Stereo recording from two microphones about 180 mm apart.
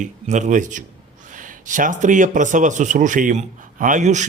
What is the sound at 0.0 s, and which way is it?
Speech, 40° right (ahead or behind).